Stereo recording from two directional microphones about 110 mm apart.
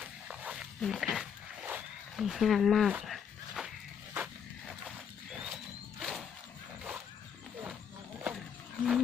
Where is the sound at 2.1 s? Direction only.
Centre (ahead or behind).